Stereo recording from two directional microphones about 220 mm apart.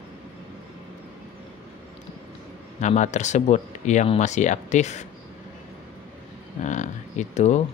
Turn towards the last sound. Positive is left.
turn(degrees=30)  # may be behind; listen again after turning